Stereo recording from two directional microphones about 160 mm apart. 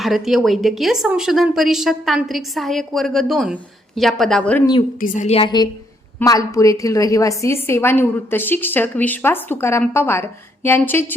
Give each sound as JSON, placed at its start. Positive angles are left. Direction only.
{"t": 0.0, "sound": "a woman's voice", "side_deg": 0}
{"t": 4.6, "sound": "speech", "side_deg": 30}
{"t": 4.9, "sound": "a woman's voice", "side_deg": 55}
{"t": 6.1, "sound": "a woman's voice", "side_deg": 20}